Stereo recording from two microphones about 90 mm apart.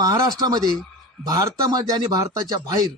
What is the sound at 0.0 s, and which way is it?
Speech, 45° right (ahead or behind).